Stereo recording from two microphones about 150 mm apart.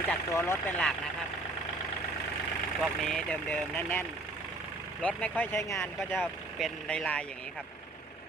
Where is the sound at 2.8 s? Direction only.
5° left (ahead or behind).